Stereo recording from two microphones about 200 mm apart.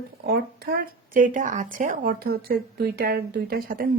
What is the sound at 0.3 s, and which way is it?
Speech, 50° right (ahead or behind).